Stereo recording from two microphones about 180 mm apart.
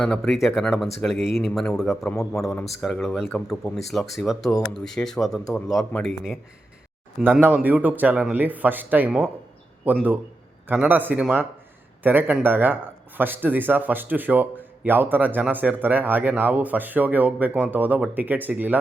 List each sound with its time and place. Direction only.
0.0 s speech: 5° left (ahead or behind)